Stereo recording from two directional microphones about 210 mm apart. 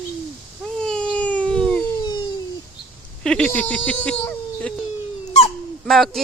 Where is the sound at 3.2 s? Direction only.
5° left (ahead or behind).